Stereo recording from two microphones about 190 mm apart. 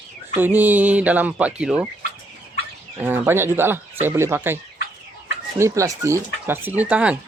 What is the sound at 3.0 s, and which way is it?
Speech, 10° right (ahead or behind).